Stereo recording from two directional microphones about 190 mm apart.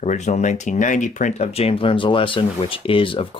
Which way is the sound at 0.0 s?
40° left (ahead or behind).